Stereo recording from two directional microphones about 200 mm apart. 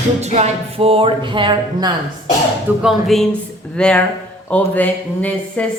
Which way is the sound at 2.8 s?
Centre (ahead or behind).